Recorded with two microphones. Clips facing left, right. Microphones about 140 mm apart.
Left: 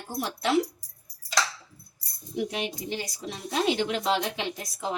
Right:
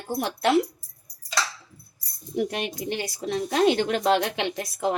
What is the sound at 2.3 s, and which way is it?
Speech, 50° right (ahead or behind).